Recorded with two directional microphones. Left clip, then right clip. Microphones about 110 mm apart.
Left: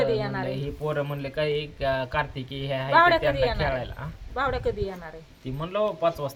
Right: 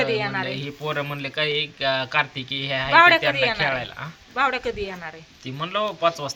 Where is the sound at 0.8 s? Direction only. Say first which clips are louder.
Right 2 dB; 35° left (ahead or behind); by 2.9 s 50° left (ahead or behind).